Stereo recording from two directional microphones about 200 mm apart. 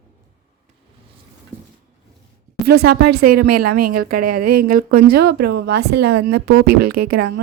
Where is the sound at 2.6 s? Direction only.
50° right (ahead or behind).